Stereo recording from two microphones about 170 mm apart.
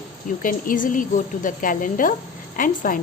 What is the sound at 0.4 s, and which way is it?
A woman's voice, 55° left (ahead or behind).